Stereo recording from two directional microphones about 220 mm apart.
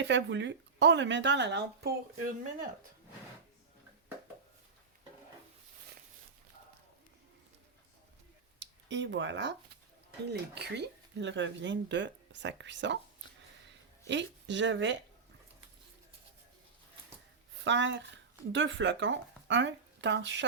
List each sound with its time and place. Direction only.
0.0 s speech: 55° right (ahead or behind)
8.5 s speech: 55° right (ahead or behind)
14.1 s speech: 55° right (ahead or behind)
17.6 s speech: 55° right (ahead or behind)